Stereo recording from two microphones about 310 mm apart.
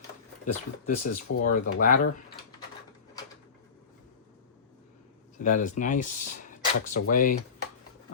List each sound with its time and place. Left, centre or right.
0.4 s speech: left
5.5 s speech: left